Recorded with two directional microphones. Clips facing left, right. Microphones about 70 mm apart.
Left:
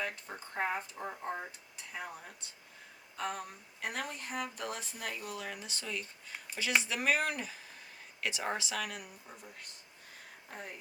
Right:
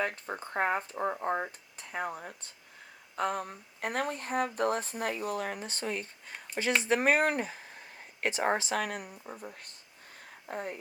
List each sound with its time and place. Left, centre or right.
0.0 s speech: right